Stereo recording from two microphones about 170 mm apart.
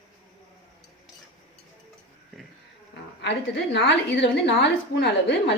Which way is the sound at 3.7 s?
85° left.